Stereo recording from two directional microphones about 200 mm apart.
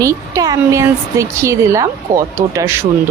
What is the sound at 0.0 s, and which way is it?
Speech, 15° right (ahead or behind).